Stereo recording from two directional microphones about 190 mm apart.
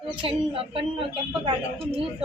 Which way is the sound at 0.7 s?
25° right (ahead or behind).